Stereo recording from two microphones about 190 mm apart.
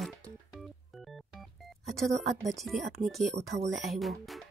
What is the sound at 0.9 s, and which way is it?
Organ, centre (ahead or behind).